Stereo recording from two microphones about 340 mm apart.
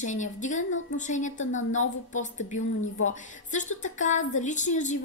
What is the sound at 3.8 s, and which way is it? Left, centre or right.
A woman's voice, left.